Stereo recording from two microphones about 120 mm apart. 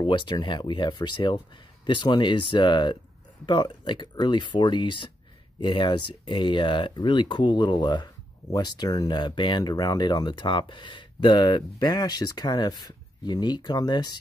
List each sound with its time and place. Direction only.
0.0 s speech: 40° left (ahead or behind)